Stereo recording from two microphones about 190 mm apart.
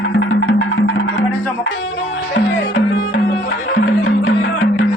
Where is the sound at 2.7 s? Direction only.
70° left (ahead or behind).